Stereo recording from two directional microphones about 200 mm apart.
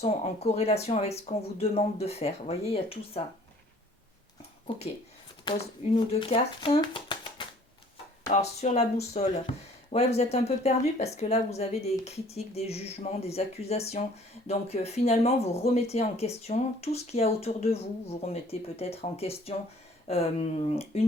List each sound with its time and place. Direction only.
0.0 s speech: 30° left (ahead or behind)
4.7 s speech: 25° left (ahead or behind)
8.3 s speech: 35° left (ahead or behind)